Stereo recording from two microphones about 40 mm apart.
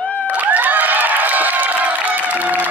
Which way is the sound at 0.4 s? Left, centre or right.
Right.